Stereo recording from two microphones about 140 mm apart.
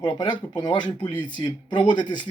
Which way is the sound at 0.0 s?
35° left (ahead or behind).